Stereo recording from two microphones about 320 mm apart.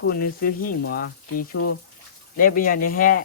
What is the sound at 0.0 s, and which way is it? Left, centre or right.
Speech, left.